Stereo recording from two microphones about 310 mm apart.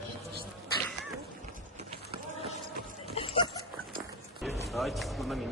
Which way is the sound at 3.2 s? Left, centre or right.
Centre.